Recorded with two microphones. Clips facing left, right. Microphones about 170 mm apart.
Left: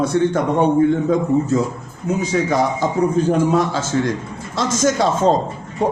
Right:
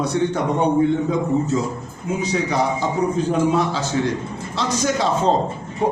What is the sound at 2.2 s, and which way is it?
A man's voice, 45° left (ahead or behind).